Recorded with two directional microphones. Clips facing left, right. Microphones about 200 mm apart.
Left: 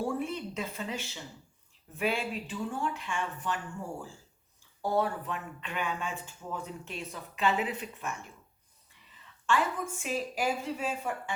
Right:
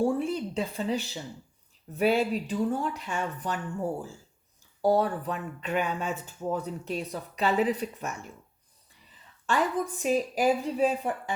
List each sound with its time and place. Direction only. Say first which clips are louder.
0.0 s speech: right 6 dB; 30° right (ahead or behind)
4.8 s speech: right 5 dB; 35° right (ahead or behind)
9.5 s speech: right 3 dB; 40° right (ahead or behind)